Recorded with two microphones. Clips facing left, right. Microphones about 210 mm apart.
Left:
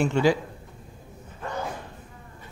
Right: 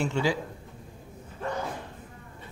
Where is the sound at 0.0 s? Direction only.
55° left (ahead or behind).